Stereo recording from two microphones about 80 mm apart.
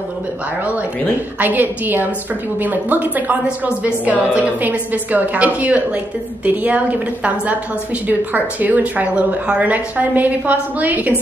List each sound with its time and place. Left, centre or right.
1.4 s a woman's voice: right